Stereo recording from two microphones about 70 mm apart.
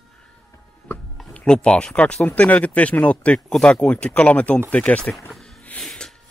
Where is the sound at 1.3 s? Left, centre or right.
Centre.